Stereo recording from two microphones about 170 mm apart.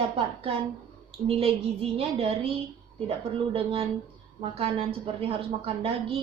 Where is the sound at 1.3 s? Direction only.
35° right (ahead or behind).